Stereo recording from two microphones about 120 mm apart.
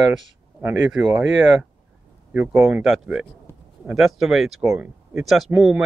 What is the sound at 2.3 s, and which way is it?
Speech, 20° right (ahead or behind).